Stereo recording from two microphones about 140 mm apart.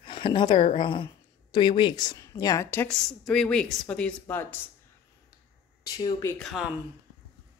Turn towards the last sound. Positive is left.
turn(degrees=0)  # may be behind; listen again after turning